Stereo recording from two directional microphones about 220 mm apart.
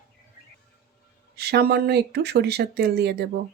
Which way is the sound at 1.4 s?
45° right (ahead or behind).